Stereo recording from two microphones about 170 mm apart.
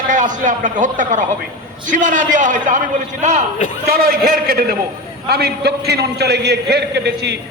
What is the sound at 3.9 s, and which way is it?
A man's voice, 60° right (ahead or behind).